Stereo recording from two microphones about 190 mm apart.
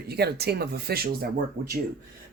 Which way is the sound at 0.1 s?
55° right (ahead or behind).